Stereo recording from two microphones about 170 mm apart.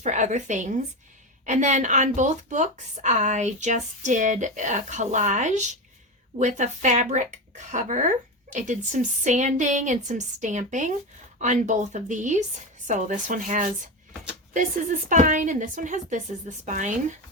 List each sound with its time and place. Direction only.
0.0 s a woman's voice: 45° right (ahead or behind)